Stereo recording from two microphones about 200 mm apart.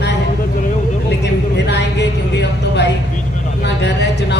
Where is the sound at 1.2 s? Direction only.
60° left (ahead or behind).